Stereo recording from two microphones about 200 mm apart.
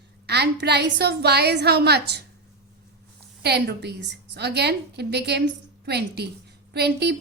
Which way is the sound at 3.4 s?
55° right (ahead or behind).